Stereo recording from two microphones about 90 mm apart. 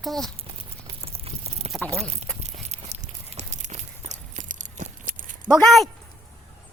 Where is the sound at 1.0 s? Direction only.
90° right.